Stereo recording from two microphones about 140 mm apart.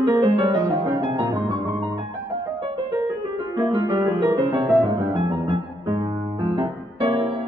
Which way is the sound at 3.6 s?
35° right (ahead or behind).